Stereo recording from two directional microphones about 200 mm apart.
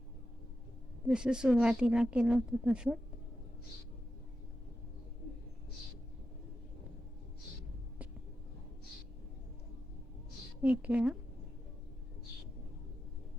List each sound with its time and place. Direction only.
1.0 s speech: 5° right (ahead or behind)
10.6 s a woman's voice: 5° right (ahead or behind)